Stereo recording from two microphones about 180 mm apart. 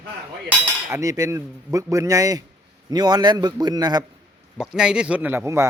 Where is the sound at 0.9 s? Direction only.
20° right (ahead or behind).